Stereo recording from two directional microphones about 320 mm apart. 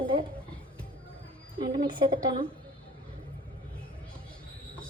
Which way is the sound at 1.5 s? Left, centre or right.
Centre.